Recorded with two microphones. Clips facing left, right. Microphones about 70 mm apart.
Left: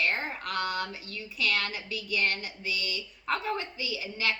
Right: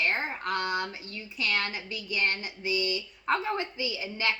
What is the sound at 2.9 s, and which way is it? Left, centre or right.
Speech, centre.